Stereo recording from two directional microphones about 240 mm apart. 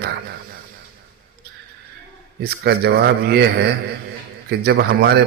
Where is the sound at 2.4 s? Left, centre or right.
Right.